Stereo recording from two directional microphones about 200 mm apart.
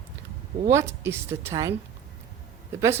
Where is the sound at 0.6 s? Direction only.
15° right (ahead or behind).